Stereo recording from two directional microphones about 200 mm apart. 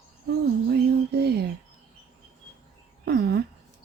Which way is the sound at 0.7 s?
55° right (ahead or behind).